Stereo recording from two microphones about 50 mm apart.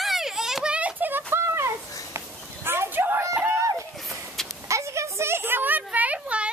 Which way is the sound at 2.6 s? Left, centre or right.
Right.